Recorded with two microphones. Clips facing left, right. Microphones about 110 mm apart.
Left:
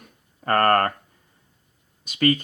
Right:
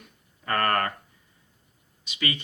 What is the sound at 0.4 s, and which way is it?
Speech, 45° left (ahead or behind).